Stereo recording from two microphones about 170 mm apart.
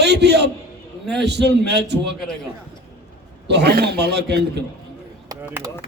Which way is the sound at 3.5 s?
70° right (ahead or behind).